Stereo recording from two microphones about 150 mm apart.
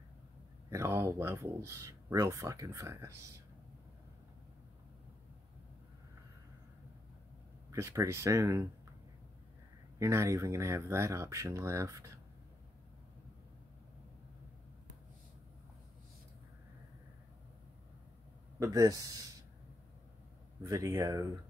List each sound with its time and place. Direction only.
0.7 s speech: 20° right (ahead or behind)
7.7 s speech: 20° right (ahead or behind)
9.9 s speech: 20° right (ahead or behind)
18.6 s speech: 25° right (ahead or behind)
20.6 s speech: 20° right (ahead or behind)